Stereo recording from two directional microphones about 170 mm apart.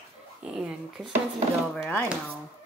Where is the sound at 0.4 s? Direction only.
5° right (ahead or behind).